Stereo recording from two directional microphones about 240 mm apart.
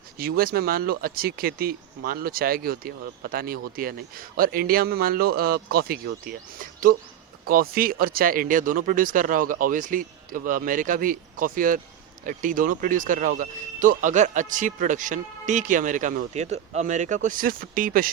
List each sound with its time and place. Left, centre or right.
0.2 s speech: right